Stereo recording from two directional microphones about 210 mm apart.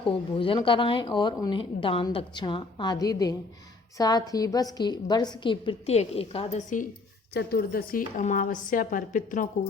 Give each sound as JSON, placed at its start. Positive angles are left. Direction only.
{"t": 0.0, "sound": "a woman's voice", "side_deg": 25}
{"t": 7.3, "sound": "a woman's voice", "side_deg": 45}